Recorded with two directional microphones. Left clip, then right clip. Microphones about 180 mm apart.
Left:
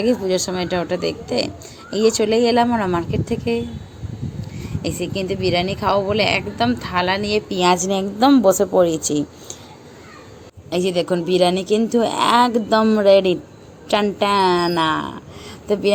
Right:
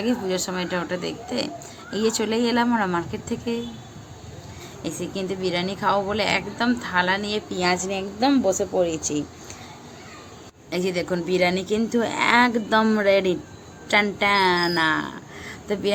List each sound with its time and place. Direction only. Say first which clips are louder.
0.0 s a woman's voice: left 6 dB; 20° left (ahead or behind)
4.8 s a woman's voice: left 5 dB; 20° left (ahead or behind); by 9.2 s 35° left (ahead or behind)
10.8 s a woman's voice: left 5 dB; 20° left (ahead or behind)